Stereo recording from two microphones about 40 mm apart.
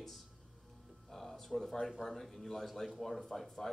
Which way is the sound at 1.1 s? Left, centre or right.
Centre.